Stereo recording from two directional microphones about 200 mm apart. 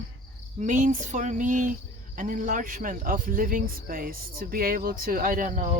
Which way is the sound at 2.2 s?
40° right (ahead or behind).